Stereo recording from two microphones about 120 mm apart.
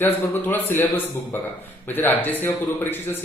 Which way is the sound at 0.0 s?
15° left (ahead or behind).